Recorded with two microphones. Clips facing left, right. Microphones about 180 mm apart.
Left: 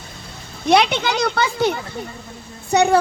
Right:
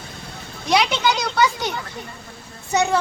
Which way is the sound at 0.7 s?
55° left (ahead or behind).